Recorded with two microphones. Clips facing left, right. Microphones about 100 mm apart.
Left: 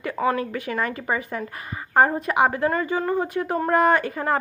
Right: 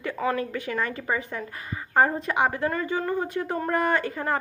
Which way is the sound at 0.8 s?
65° left (ahead or behind).